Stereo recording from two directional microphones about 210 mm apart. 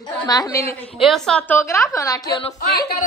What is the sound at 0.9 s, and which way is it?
A woman's voice, centre (ahead or behind).